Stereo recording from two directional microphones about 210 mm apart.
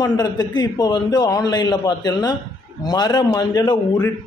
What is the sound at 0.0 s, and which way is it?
A man's voice, 20° left (ahead or behind).